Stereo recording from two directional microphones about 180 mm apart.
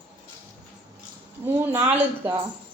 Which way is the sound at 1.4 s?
15° right (ahead or behind).